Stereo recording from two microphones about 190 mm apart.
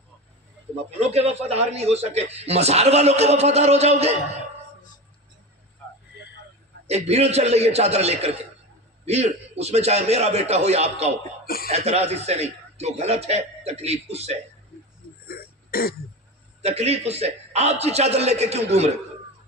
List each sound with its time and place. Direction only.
0.8 s a man's voice: 35° right (ahead or behind)
6.9 s a man's voice: 35° right (ahead or behind)
11.4 s cough: 50° left (ahead or behind)
11.7 s a man's voice: 35° right (ahead or behind)
15.2 s throat clearing: 50° left (ahead or behind)
16.6 s a man's voice: 35° right (ahead or behind)